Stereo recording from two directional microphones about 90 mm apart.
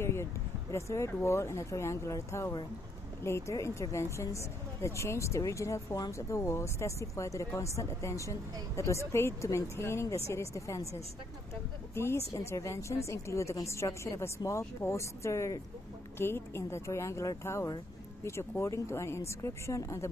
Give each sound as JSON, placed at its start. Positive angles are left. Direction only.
{"t": 0.0, "sound": "speech", "side_deg": 30}